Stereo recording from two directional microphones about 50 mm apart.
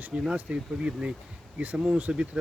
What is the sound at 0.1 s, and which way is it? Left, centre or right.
Speech, right.